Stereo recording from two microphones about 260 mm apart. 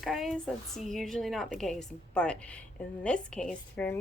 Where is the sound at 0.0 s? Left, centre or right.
Centre.